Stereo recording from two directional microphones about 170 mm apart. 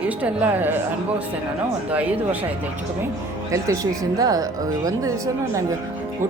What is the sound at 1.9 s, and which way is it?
Speech, 10° right (ahead or behind).